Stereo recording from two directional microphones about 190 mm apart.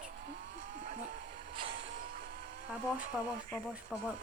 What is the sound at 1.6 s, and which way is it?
Vehicle, 25° right (ahead or behind).